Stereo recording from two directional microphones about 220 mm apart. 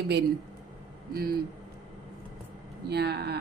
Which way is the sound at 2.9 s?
50° right (ahead or behind).